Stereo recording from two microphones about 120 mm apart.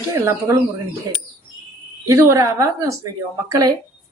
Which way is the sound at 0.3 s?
25° right (ahead or behind).